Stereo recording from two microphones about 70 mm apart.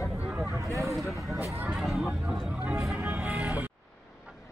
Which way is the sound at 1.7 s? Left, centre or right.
Centre.